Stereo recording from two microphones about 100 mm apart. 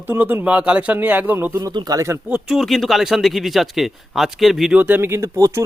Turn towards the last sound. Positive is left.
turn(degrees=-30)  # may be behind; listen again after turning